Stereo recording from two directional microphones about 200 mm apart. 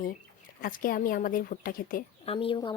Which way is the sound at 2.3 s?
25° left (ahead or behind).